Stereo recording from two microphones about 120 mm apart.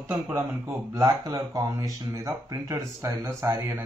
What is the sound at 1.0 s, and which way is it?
Speech, 25° right (ahead or behind).